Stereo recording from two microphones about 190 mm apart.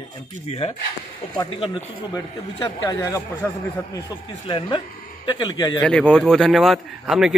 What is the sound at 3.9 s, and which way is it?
Speech, 20° left (ahead or behind).